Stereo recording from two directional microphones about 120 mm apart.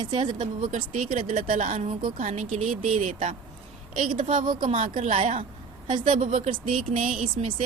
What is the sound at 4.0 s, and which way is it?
A woman's voice, 90° right.